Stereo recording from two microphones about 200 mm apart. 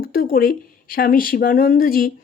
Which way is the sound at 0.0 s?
45° left (ahead or behind).